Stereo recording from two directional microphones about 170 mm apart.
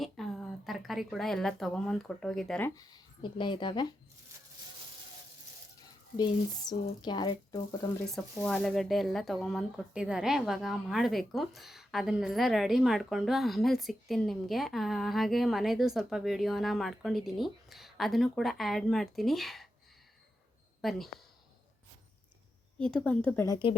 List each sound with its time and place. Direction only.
0.0 s a woman's voice: centre (ahead or behind)
2.6 s speech: 25° left (ahead or behind)
5.8 s speech: 25° left (ahead or behind)
8.0 s speech: centre (ahead or behind)
20.8 s speech: centre (ahead or behind)
22.8 s speech: 5° left (ahead or behind)